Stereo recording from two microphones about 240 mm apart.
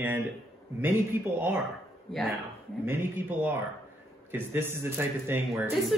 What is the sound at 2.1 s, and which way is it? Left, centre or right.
Speech, centre.